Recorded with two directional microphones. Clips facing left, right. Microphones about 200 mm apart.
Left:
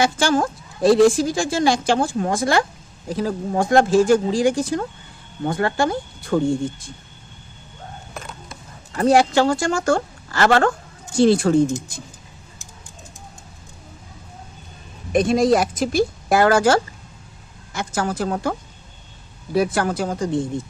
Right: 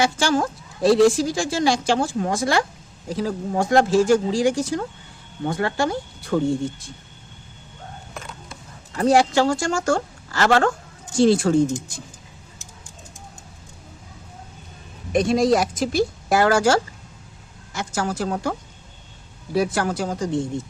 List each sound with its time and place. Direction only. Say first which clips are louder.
0.0 s a woman's voice: left 2 dB; 50° left (ahead or behind)
8.1 s a sound: left 2 dB; 40° left (ahead or behind)
8.9 s speech: left 1 dB; 55° left (ahead or behind)
15.1 s a woman's voice: left 2 dB; 55° left (ahead or behind)
19.5 s speech: left 2 dB; 55° left (ahead or behind)